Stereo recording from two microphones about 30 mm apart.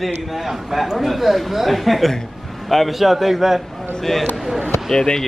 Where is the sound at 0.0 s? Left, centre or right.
Centre.